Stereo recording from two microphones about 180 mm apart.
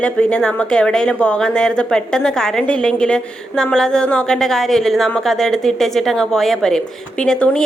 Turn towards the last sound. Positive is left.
turn(degrees=5)  # may be behind; listen again after turning